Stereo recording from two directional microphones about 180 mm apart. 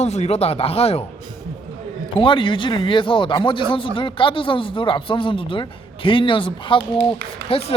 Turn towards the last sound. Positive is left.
turn(degrees=35)  # may be behind; listen again after turning